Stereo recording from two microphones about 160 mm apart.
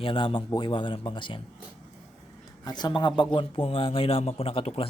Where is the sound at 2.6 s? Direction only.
25° left (ahead or behind).